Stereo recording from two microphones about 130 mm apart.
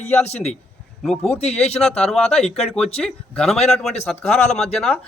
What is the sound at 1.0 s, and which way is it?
Speech, 5° left (ahead or behind).